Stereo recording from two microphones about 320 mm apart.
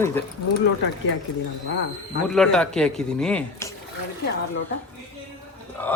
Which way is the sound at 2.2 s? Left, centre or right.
Centre.